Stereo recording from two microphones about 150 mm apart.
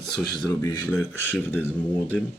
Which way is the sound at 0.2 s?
25° left (ahead or behind).